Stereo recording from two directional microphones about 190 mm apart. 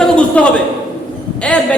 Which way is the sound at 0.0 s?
5° left (ahead or behind).